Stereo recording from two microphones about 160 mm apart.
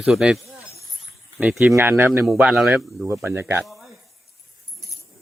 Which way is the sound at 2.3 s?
5° right (ahead or behind).